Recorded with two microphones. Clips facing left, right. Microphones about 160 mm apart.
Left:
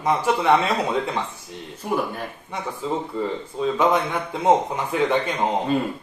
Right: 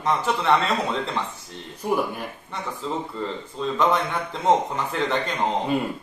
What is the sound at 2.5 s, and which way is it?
Speech, 10° left (ahead or behind).